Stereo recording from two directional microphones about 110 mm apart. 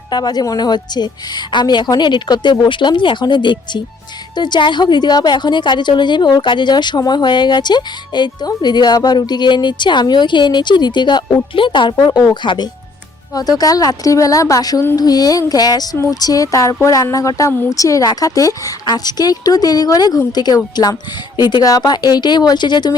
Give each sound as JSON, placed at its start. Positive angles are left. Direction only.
{"t": 0.1, "sound": "a woman's voice", "side_deg": 40}